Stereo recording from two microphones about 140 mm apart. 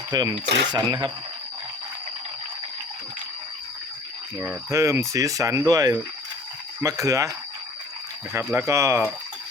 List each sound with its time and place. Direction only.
0.1 s speech: 30° right (ahead or behind)
4.4 s speech: 15° right (ahead or behind)
8.5 s speech: 20° right (ahead or behind)